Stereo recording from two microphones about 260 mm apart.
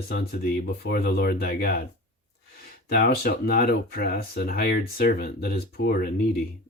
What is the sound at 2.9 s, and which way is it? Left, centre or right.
Speech, left.